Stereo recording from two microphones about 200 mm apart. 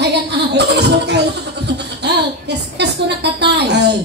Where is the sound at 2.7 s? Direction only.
55° right (ahead or behind).